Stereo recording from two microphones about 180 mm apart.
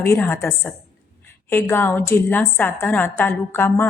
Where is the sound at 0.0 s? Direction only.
15° left (ahead or behind).